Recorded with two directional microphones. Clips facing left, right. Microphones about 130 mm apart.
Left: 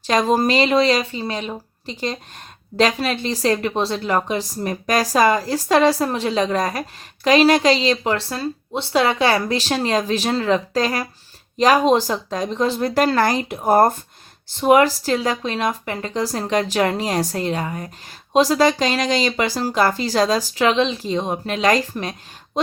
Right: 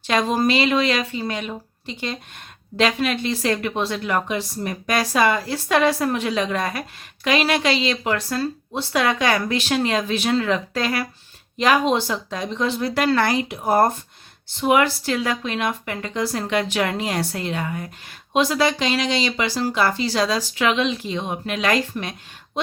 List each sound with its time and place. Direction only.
0.0 s speech: 40° left (ahead or behind)